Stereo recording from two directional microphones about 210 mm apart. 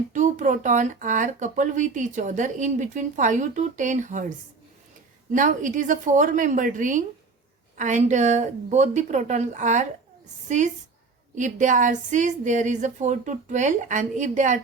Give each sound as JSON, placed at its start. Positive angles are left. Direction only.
{"t": 0.1, "sound": "speech", "side_deg": -35}